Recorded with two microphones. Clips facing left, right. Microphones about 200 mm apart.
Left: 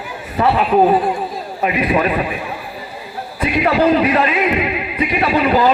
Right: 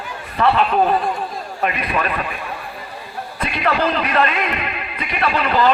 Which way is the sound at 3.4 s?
15° left (ahead or behind).